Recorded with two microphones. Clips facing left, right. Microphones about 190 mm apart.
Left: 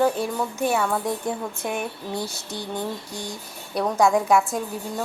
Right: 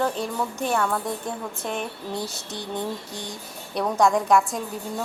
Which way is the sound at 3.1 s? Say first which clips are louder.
Left 2 dB; 20° right (ahead or behind).